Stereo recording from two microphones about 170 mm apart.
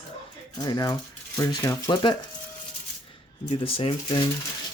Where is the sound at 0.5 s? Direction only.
25° left (ahead or behind).